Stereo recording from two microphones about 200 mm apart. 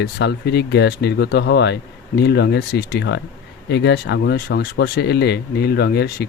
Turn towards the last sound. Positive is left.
turn(degrees=55)  # may be behind; listen again after turning